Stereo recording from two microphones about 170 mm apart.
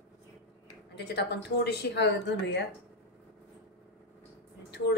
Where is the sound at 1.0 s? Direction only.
80° left.